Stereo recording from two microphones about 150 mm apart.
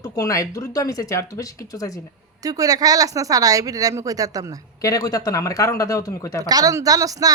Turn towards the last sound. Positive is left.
turn(degrees=-25)  # may be behind; listen again after turning